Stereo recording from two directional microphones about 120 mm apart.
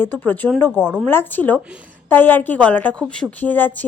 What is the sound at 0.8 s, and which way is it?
Speech, 10° right (ahead or behind).